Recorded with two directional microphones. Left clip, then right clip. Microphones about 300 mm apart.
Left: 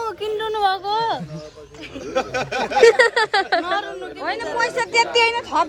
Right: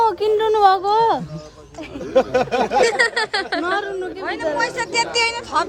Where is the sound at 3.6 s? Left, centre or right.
Right.